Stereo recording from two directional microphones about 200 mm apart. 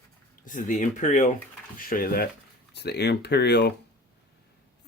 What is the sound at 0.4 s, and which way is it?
Speech, 40° left (ahead or behind).